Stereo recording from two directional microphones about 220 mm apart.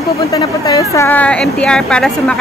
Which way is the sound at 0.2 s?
15° left (ahead or behind).